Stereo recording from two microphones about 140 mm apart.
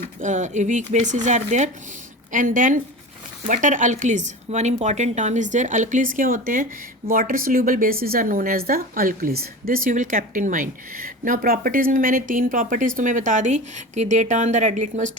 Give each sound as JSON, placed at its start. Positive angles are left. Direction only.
{"t": 0.2, "sound": "a woman's voice", "side_deg": -60}
{"t": 7.1, "sound": "speech", "side_deg": -90}